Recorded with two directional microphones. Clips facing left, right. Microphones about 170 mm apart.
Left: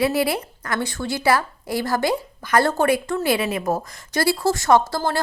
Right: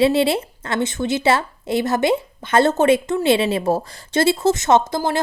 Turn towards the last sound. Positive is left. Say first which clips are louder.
# right 1 dB
turn(degrees=-20)  # may be behind; listen again after turning